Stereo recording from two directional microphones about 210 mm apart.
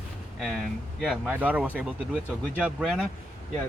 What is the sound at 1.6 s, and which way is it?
Speech, 5° left (ahead or behind).